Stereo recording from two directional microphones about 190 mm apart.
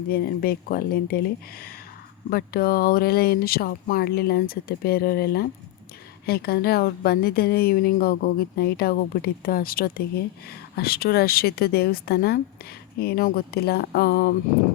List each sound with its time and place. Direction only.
0.1 s a woman's voice: 50° left (ahead or behind)
2.3 s a woman's voice: 55° left (ahead or behind)